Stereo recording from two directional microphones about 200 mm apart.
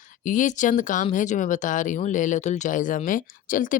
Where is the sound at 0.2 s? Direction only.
40° left (ahead or behind).